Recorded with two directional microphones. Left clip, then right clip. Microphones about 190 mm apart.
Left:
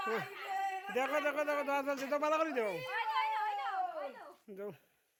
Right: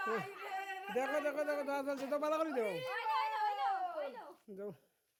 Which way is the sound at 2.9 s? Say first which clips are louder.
Left 2 dB; 75° right (ahead or behind).